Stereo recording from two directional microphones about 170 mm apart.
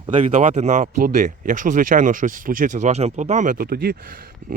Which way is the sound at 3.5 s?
65° right (ahead or behind).